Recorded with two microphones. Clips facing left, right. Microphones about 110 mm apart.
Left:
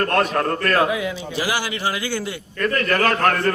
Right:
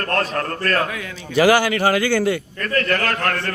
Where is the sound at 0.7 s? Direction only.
15° left (ahead or behind).